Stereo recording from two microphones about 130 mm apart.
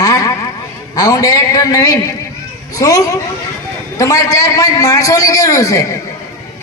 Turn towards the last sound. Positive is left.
turn(degrees=25)  # may be behind; listen again after turning